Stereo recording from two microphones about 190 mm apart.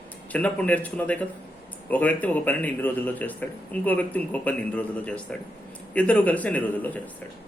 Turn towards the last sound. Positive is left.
turn(degrees=10)  # may be behind; listen again after turning